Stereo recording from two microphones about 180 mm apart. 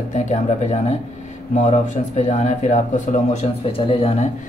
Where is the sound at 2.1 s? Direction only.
40° left (ahead or behind).